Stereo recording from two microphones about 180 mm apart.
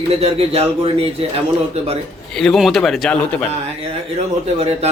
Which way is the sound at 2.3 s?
Centre (ahead or behind).